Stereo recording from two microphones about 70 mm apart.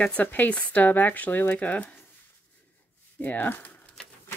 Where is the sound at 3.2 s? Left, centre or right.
Left.